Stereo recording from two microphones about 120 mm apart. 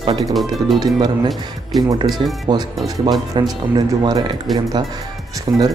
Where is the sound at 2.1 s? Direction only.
Centre (ahead or behind).